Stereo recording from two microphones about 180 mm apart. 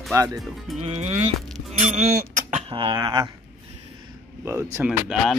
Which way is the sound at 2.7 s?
25° right (ahead or behind).